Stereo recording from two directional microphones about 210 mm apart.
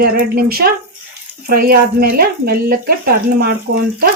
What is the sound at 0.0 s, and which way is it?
Speech, 45° right (ahead or behind).